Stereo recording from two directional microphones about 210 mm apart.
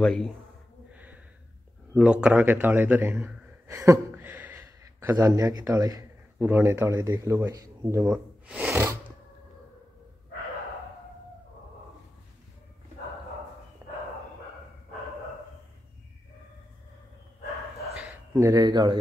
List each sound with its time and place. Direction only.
0.0 s a man's voice: 5° left (ahead or behind)
0.9 s snort: 5° right (ahead or behind)
2.0 s speech: 5° right (ahead or behind)
13.8 s a sound: 20° right (ahead or behind)
17.9 s speech: 5° right (ahead or behind)